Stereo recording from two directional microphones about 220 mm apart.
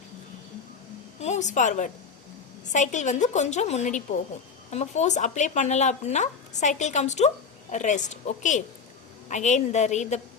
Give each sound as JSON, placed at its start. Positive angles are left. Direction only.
{"t": 1.2, "sound": "speech", "side_deg": 30}